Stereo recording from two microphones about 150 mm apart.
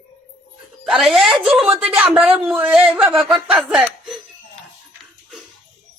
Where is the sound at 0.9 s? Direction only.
Centre (ahead or behind).